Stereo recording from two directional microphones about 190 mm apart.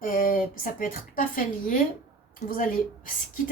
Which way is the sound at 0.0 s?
45° left (ahead or behind).